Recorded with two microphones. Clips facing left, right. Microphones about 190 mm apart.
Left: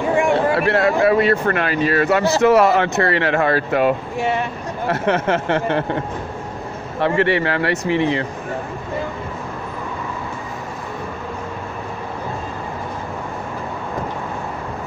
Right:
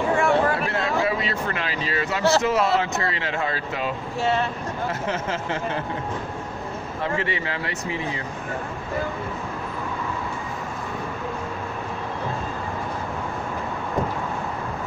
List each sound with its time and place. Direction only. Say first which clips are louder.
0.1 s a sound: left 4 dB; 15° left (ahead or behind)
0.6 s a sound: left 8 dB; 70° left (ahead or behind)
2.4 s speech: left 8 dB; 65° left (ahead or behind)
4.2 s speech: right 2 dB; 15° left (ahead or behind)
4.8 s speech: left 10 dB; 65° left (ahead or behind)
7.0 s speech: left 10 dB; 65° left (ahead or behind)